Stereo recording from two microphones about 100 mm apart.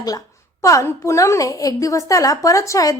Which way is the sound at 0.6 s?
30° left (ahead or behind).